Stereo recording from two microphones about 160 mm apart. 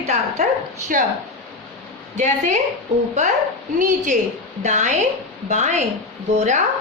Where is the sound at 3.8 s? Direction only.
50° right (ahead or behind).